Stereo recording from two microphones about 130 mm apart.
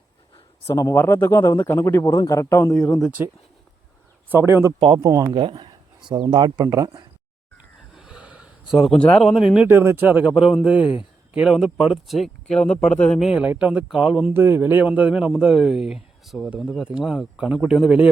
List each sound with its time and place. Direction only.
0.7 s speech: 25° left (ahead or behind)
2.7 s speech: 5° left (ahead or behind)
4.3 s speech: 20° right (ahead or behind)
5.4 s speech: 40° right (ahead or behind)
7.9 s a sound: 5° right (ahead or behind)
9.0 s a man's voice: 5° left (ahead or behind)
13.2 s a man's voice: 10° right (ahead or behind)